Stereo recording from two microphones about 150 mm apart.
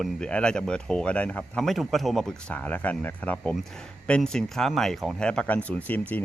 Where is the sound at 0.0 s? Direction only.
5° left (ahead or behind).